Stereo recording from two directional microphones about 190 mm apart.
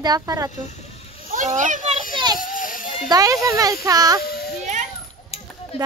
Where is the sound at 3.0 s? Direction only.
20° right (ahead or behind).